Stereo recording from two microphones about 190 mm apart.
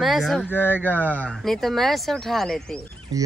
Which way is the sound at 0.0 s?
Centre (ahead or behind).